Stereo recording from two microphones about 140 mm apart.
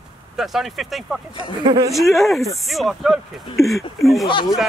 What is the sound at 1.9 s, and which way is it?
Speech, centre (ahead or behind).